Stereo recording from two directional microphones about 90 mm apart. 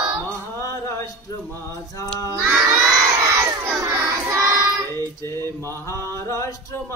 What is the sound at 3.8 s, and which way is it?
Child singing, 40° right (ahead or behind).